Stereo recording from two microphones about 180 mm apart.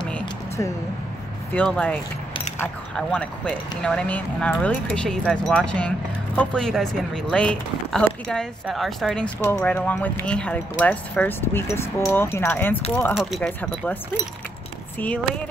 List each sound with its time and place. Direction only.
1.5 s speech: 10° left (ahead or behind)
13.1 s speech: centre (ahead or behind)
13.5 s speech: 10° left (ahead or behind)